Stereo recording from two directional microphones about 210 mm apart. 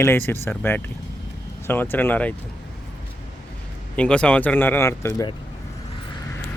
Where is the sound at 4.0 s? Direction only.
5° left (ahead or behind).